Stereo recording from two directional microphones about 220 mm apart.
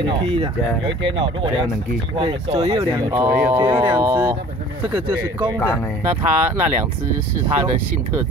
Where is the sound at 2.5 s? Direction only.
25° right (ahead or behind); by 4.4 s 10° right (ahead or behind).